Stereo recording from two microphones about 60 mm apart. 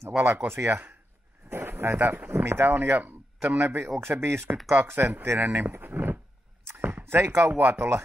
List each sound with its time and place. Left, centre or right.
0.2 s speech: right
2.3 s a man's voice: right
5.2 s speech: right
5.8 s a sound: right
6.8 s chop: right
7.7 s speech: right